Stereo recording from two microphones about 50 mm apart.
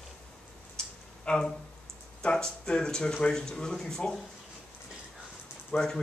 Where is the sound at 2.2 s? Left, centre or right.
Centre.